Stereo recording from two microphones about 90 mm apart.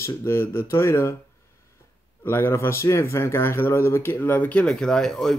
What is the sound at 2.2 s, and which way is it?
Speech, 25° left (ahead or behind).